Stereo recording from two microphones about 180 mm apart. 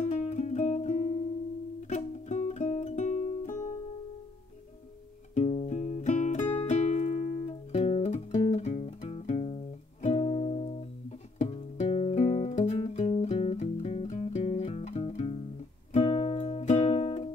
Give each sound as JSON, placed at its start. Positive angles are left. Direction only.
{"t": 0.0, "sound": "music", "side_deg": 40}
{"t": 5.3, "sound": "music", "side_deg": 40}